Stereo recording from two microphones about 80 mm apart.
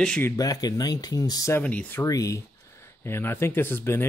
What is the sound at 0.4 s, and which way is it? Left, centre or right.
Speech, left.